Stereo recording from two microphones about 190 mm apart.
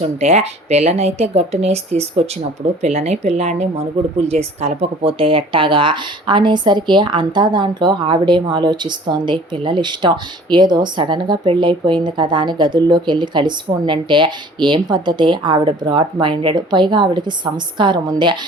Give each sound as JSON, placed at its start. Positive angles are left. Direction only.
{"t": 0.0, "sound": "a woman's voice", "side_deg": -35}